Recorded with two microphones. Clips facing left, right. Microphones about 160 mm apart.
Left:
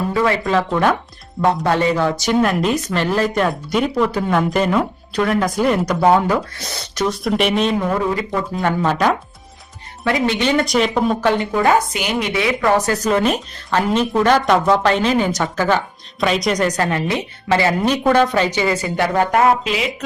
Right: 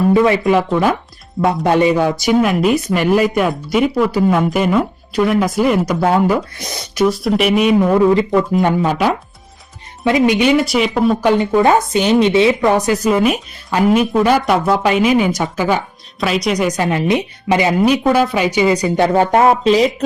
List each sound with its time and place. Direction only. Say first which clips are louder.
0.1 s a woman's voice: right 4 dB; 20° right (ahead or behind)
0.7 s speech: right 2 dB; 5° right (ahead or behind)
1.6 s a woman's voice: right 7 dB; 15° right (ahead or behind)
7.7 s a woman's voice: right 7 dB; 25° right (ahead or behind); by 11.2 s 5° right (ahead or behind)
11.2 s a woman's voice: right 4 dB; 15° right (ahead or behind); by 20.1 s 35° right (ahead or behind)